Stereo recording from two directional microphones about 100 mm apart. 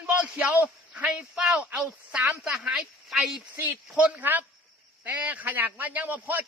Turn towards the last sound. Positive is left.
turn(degrees=-15)  # may be behind; listen again after turning